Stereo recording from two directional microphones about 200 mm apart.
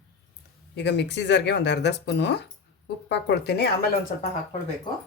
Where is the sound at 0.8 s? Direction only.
60° left (ahead or behind).